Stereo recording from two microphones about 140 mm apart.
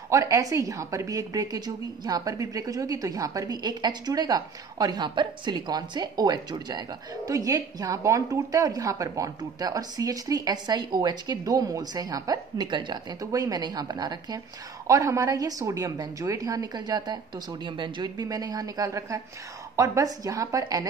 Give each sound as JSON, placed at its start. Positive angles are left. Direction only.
{"t": 0.1, "sound": "a woman's voice", "side_deg": -25}